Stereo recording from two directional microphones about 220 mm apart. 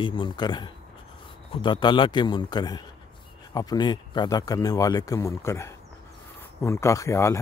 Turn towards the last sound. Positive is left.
turn(degrees=15)  # may be behind; listen again after turning